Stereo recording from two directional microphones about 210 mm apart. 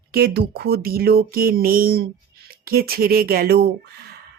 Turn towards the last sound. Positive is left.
turn(degrees=-50)  # may be behind; listen again after turning